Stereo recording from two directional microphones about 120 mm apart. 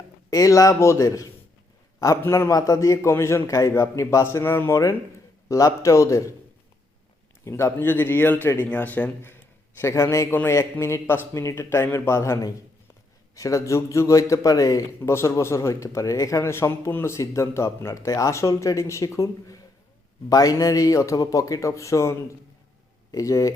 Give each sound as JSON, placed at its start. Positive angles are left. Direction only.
{"t": 0.3, "sound": "a man's voice", "side_deg": 30}
{"t": 7.4, "sound": "a man's voice", "side_deg": 20}